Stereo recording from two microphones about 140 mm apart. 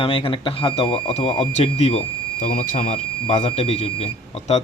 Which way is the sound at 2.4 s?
75° left (ahead or behind).